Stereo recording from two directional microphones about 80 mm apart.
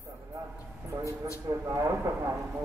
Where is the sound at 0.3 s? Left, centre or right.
Right.